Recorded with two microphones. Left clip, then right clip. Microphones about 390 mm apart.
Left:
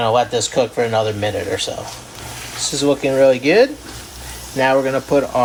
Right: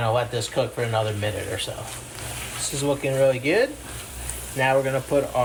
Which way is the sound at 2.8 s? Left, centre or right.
Left.